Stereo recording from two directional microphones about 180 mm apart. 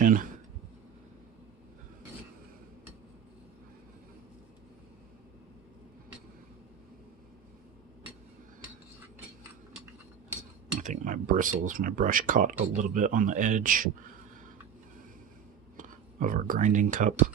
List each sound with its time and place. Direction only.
0.0 s a sound: 50° right (ahead or behind)
10.8 s speech: 45° right (ahead or behind)
15.8 s speech: 50° right (ahead or behind)